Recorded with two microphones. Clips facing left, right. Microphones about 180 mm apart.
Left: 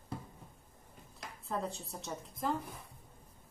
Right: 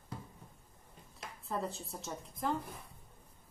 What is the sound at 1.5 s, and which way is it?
A woman's voice, centre (ahead or behind).